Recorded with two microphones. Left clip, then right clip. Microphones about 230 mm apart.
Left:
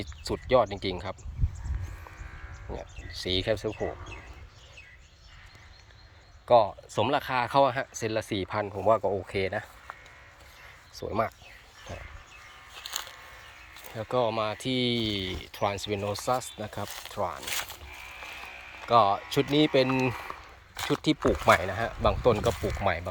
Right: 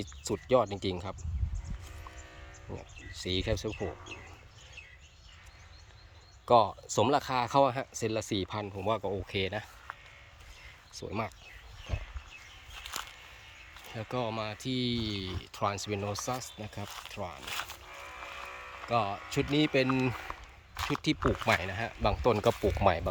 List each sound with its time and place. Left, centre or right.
0.0 s speech: centre
2.7 s speech: centre
6.4 s speech: right
9.9 s music: left
10.9 s speech: centre
13.8 s speech: centre
16.8 s speech: left
17.1 s speech: centre
17.4 s speech: left
18.9 s speech: centre
21.2 s speech: left
21.4 s speech: centre
22.8 s speech: right